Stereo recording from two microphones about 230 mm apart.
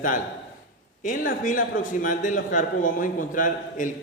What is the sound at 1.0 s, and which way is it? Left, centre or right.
A man's voice, left.